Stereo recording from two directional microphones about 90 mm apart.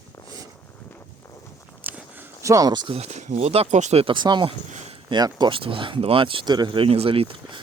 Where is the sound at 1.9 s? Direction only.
20° right (ahead or behind).